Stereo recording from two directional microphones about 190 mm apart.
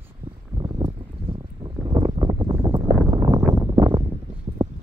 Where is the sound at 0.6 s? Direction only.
25° right (ahead or behind).